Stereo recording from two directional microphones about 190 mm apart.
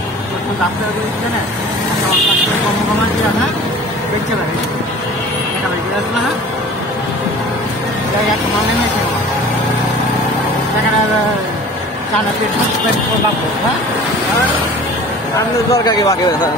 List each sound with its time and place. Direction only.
15.7 s speech: 15° left (ahead or behind)